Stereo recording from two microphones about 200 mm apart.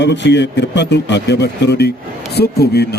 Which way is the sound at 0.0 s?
60° left (ahead or behind).